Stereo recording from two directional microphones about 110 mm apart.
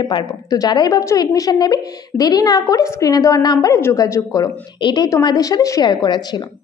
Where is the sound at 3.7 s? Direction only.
25° left (ahead or behind).